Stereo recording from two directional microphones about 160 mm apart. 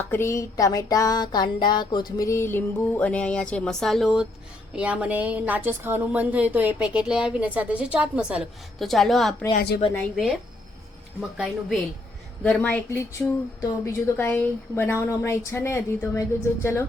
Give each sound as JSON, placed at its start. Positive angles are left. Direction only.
{"t": 0.0, "sound": "music", "side_deg": 15}
{"t": 4.7, "sound": "speech", "side_deg": -5}
{"t": 9.6, "sound": "a woman's voice", "side_deg": 70}
{"t": 11.2, "sound": "speech", "side_deg": -5}
{"t": 12.4, "sound": "music", "side_deg": 10}